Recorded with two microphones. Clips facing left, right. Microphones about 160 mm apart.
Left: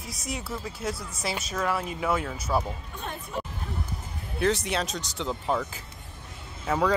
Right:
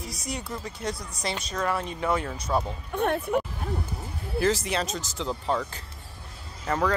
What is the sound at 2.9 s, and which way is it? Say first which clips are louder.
Speech: right 16 dB; 65° right (ahead or behind).